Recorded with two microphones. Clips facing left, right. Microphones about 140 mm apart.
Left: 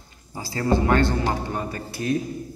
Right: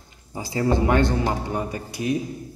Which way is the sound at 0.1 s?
20° right (ahead or behind).